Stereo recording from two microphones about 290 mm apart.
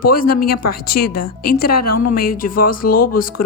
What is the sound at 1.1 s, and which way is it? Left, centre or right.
Speech, left.